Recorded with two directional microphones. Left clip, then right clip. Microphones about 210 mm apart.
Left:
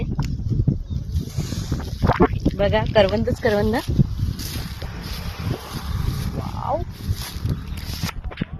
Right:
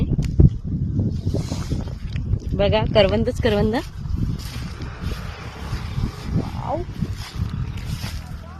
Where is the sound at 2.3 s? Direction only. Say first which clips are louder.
Even; 5° right (ahead or behind).